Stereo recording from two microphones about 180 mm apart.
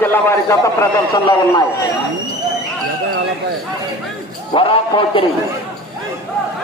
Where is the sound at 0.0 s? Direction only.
10° left (ahead or behind).